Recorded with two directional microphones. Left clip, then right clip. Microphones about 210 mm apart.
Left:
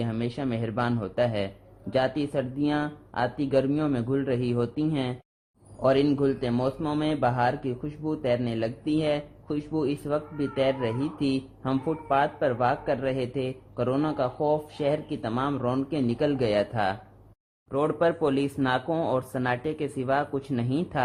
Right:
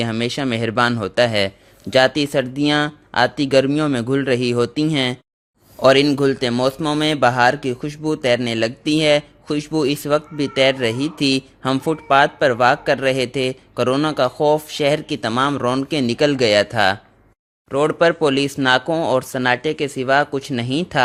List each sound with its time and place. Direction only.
0.0 s a man's voice: 40° right (ahead or behind)